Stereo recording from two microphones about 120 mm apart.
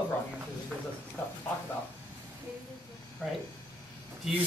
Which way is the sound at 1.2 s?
15° left (ahead or behind).